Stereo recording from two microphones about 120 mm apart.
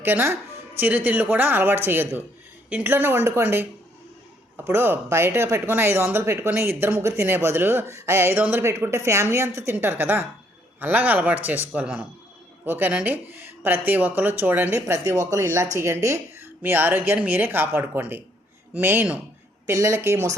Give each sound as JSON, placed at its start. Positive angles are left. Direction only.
{"t": 0.0, "sound": "speech", "side_deg": -20}
{"t": 19.6, "sound": "speech", "side_deg": -25}